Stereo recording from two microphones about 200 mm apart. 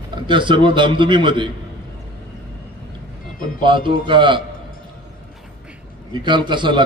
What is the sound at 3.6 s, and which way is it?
Speech, 25° right (ahead or behind).